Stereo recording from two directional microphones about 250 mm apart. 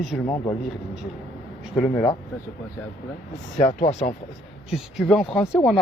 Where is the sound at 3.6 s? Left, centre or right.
Left.